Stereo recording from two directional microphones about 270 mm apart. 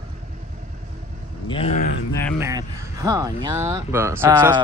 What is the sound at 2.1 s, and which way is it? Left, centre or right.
Speech, centre.